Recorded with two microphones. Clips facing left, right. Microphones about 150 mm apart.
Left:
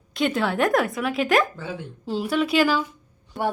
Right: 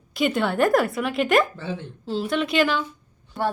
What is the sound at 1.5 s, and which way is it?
Speech, 10° left (ahead or behind).